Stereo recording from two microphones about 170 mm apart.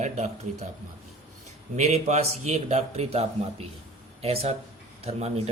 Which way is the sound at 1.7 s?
40° right (ahead or behind).